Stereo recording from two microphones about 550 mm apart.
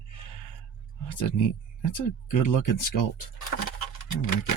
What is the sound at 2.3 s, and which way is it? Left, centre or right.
Speech, left.